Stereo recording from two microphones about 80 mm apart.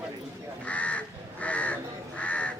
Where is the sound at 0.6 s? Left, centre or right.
Centre.